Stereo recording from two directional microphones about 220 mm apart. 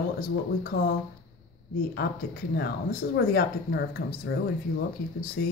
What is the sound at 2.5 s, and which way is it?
Speech, 45° left (ahead or behind).